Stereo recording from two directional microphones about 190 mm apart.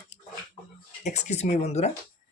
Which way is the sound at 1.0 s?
35° left (ahead or behind).